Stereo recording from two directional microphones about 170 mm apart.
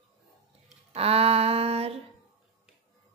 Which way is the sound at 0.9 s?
35° right (ahead or behind).